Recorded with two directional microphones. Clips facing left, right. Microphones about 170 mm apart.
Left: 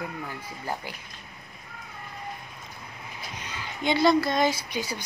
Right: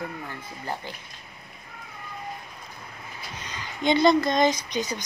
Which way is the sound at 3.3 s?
10° left (ahead or behind).